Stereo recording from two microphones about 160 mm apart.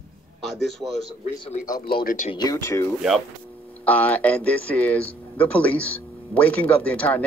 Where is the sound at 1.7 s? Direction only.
65° left (ahead or behind).